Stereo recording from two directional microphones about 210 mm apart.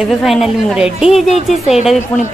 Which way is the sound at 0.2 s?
Centre (ahead or behind).